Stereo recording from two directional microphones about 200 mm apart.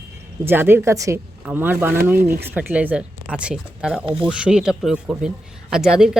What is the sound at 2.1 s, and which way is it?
Speech, 50° right (ahead or behind).